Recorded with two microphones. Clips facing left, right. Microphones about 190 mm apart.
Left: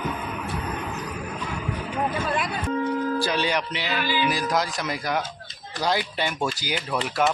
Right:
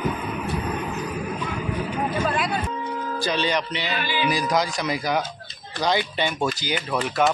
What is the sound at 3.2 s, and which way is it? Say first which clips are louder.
A man's voice: right 1 dB; 10° left (ahead or behind).